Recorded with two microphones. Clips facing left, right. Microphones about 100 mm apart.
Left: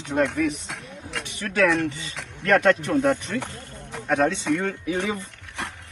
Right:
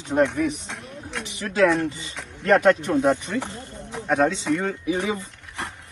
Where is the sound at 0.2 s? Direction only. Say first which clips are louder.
Right 1 dB; centre (ahead or behind).